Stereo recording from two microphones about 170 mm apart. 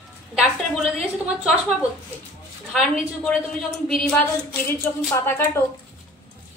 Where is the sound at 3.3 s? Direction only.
Centre (ahead or behind).